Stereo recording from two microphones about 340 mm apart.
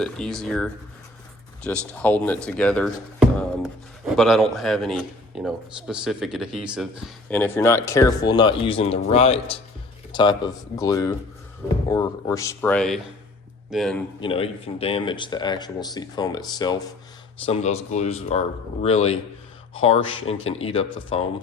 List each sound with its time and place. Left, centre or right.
0.0 s speech: centre
14.2 s speech: centre